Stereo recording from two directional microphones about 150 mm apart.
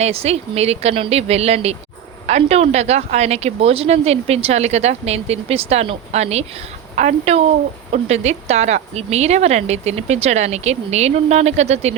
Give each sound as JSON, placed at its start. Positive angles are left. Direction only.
{"t": 0.0, "sound": "a woman's voice", "side_deg": -45}